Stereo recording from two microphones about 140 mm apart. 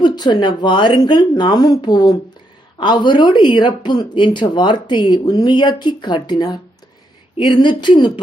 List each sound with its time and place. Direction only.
0.0 s speech: 35° left (ahead or behind)